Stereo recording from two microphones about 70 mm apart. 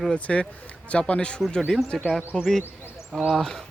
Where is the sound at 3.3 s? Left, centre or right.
Centre.